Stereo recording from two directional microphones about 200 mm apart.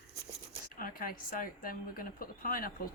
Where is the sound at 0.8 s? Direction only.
45° left (ahead or behind).